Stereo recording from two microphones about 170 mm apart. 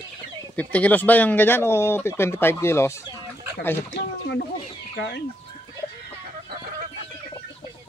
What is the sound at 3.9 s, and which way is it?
Speech, 80° left.